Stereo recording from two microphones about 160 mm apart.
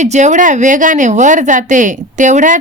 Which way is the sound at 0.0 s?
50° right (ahead or behind).